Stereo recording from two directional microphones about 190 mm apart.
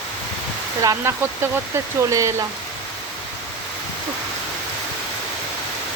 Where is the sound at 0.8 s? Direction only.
20° right (ahead or behind).